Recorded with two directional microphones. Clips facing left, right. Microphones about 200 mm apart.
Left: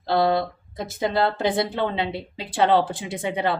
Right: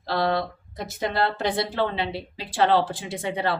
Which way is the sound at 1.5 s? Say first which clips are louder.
Left 2 dB; 20° left (ahead or behind).